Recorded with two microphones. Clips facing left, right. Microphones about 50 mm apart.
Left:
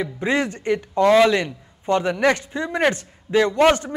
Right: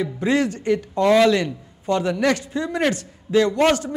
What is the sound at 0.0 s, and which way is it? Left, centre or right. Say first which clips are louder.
A man's voice: right 1 dB; left.